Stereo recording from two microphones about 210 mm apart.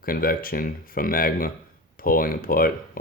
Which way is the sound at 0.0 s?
45° left (ahead or behind).